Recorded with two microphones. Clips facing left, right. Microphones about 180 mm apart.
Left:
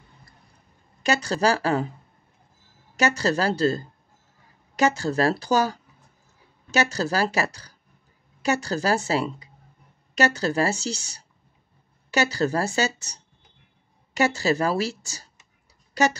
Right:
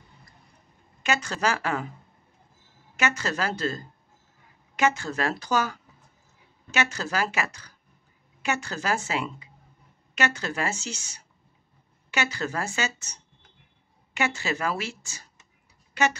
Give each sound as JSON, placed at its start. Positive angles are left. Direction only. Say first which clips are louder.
{"t": 1.0, "sound": "speech", "louder": "left 5 dB", "side_deg": 35}
{"t": 3.0, "sound": "speech", "louder": "left 5 dB", "side_deg": 35}